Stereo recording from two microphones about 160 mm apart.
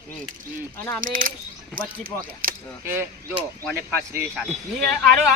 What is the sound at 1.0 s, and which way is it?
Speech, 60° right (ahead or behind).